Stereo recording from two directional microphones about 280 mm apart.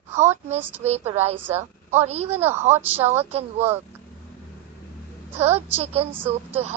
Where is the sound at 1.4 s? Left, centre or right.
Centre.